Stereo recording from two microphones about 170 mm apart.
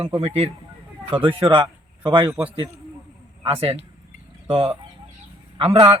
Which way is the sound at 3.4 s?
35° right (ahead or behind).